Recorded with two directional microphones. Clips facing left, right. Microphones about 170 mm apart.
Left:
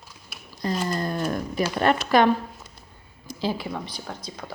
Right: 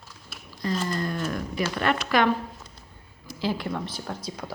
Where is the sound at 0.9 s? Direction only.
40° left (ahead or behind).